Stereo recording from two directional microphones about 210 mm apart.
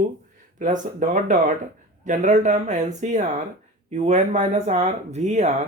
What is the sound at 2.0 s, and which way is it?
Speech, 35° right (ahead or behind).